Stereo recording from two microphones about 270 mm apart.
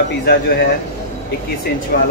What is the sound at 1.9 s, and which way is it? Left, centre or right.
Speech, left.